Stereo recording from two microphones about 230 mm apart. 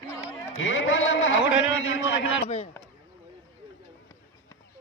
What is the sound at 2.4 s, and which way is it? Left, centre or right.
Speech, left.